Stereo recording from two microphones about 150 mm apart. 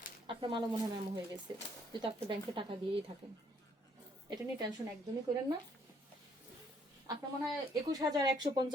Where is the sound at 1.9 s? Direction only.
30° right (ahead or behind).